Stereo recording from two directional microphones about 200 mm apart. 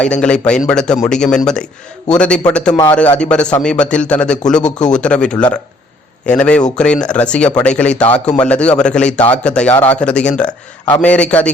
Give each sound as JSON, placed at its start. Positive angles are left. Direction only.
{"t": 0.0, "sound": "a man's voice", "side_deg": 5}
{"t": 4.6, "sound": "speech", "side_deg": 35}
{"t": 4.9, "sound": "a man's voice", "side_deg": 5}